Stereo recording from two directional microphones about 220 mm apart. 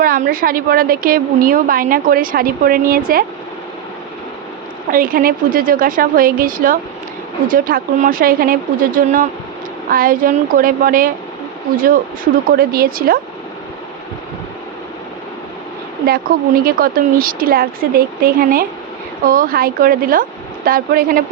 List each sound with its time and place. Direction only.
0.0 s a woman's voice: 40° right (ahead or behind)
4.9 s a woman's voice: 40° right (ahead or behind)
16.3 s a woman's voice: 45° right (ahead or behind)